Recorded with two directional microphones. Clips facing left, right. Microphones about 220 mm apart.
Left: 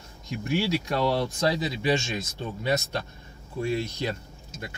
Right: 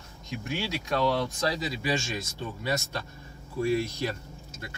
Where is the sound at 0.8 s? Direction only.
30° left (ahead or behind).